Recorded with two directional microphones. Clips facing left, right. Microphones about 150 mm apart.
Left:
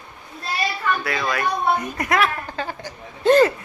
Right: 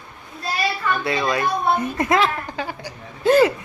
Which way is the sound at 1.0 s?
25° right (ahead or behind).